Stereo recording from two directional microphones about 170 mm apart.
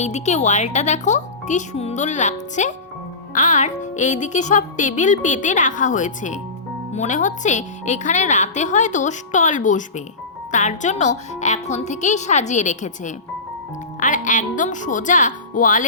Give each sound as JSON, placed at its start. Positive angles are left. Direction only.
{"t": 0.0, "sound": "a woman's voice", "side_deg": 40}